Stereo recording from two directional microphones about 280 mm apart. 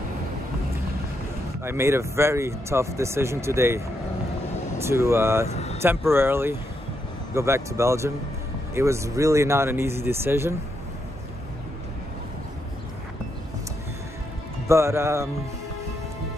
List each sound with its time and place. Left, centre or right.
1.6 s speech: centre
4.8 s speech: centre
5.5 s vehicle: left
5.8 s speech: centre
14.7 s speech: centre